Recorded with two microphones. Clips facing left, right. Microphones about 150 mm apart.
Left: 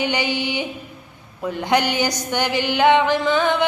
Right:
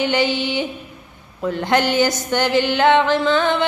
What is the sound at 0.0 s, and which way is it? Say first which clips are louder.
Music: right 3 dB; 15° left (ahead or behind).